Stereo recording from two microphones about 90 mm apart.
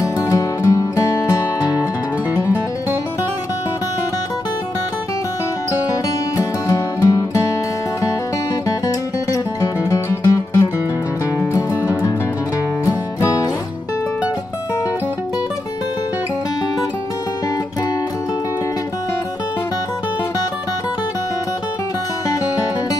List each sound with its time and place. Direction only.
0.2 s music: 40° left (ahead or behind)
5.7 s music: 45° left (ahead or behind)
8.6 s music: 40° left (ahead or behind)
12.8 s music: 35° left (ahead or behind)